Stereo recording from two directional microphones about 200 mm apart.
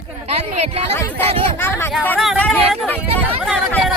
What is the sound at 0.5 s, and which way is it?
Speech, 30° right (ahead or behind).